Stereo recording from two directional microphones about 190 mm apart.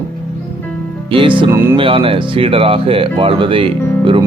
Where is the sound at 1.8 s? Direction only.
30° right (ahead or behind).